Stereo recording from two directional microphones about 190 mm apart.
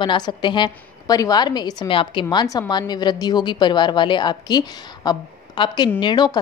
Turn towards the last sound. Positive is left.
turn(degrees=25)  # may be behind; listen again after turning